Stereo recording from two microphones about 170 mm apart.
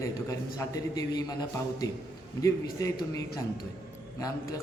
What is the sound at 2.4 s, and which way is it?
Speech, 20° left (ahead or behind).